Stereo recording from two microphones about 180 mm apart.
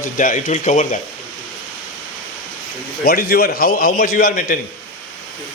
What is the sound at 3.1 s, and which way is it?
A man's voice, 55° left (ahead or behind).